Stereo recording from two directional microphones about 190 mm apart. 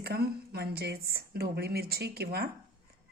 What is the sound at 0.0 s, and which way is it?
A woman's voice, 55° right (ahead or behind).